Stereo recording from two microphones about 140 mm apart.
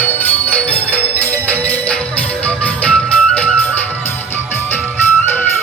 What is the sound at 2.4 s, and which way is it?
Music, 10° left (ahead or behind).